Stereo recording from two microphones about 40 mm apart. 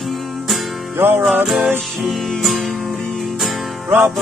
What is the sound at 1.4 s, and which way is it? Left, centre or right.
Music, centre.